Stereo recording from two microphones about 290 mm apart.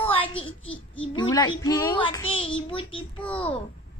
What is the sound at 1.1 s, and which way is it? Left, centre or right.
A child's voice, centre.